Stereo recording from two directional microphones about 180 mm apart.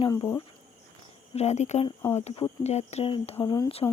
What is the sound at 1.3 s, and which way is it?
Speech, 35° left (ahead or behind).